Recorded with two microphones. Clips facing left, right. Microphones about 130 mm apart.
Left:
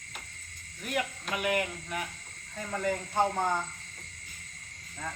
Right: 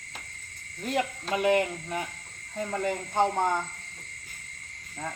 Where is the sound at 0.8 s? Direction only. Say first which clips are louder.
Right 4 dB; 30° right (ahead or behind).